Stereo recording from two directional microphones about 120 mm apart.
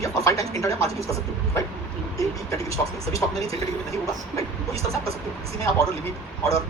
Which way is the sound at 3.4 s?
30° left (ahead or behind).